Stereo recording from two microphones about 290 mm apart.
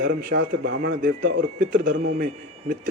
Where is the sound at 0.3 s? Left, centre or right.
Right.